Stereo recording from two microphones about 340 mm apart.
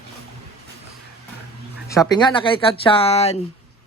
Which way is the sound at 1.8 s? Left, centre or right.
Centre.